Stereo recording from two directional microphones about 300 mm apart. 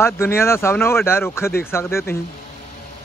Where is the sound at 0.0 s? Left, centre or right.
Centre.